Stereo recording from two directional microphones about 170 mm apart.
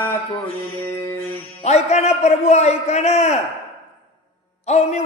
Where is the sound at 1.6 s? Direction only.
40° left (ahead or behind).